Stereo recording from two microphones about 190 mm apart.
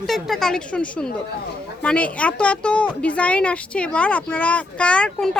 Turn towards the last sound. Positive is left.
turn(degrees=5)  # may be behind; listen again after turning